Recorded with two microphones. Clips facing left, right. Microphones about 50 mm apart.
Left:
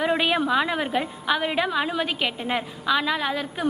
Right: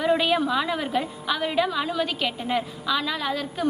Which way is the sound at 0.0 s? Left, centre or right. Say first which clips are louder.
Right 1 dB; centre.